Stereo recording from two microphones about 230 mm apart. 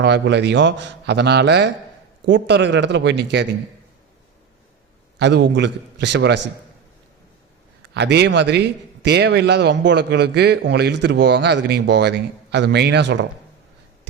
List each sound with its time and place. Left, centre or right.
0.0 s a man's voice: right
5.2 s a man's voice: right
7.9 s a man's voice: right